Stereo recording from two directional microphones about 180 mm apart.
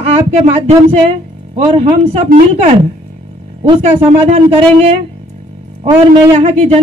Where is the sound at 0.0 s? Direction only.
35° right (ahead or behind).